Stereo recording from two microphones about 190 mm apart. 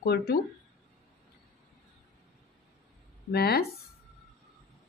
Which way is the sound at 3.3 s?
55° left (ahead or behind).